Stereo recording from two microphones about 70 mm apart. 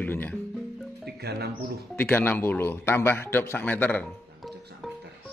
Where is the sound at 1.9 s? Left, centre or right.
Left.